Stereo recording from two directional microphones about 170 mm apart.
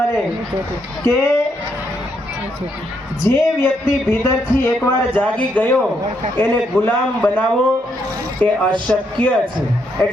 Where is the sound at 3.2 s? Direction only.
15° left (ahead or behind).